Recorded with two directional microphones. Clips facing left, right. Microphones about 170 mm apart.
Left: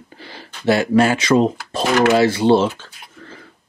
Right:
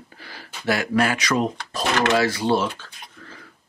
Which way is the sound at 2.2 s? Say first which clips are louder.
Left 7 dB; 25° left (ahead or behind).